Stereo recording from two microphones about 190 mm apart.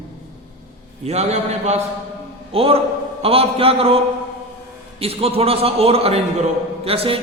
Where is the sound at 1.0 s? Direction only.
35° right (ahead or behind).